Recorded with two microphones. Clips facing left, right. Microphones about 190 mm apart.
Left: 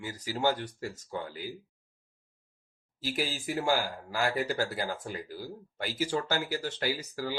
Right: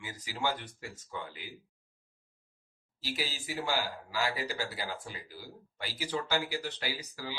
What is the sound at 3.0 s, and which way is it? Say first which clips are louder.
Speech: left 5 dB; 50° left (ahead or behind).